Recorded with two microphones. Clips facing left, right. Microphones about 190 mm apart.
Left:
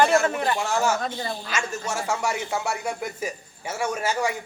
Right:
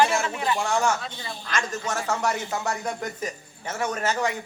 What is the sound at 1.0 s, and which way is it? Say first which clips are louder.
Speech: left 7 dB; 45° left (ahead or behind).